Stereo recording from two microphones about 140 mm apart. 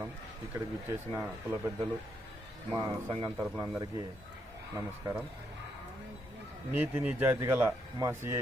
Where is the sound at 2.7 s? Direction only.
30° right (ahead or behind).